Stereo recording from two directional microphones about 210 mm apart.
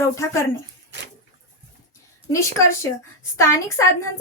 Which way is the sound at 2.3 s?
15° left (ahead or behind).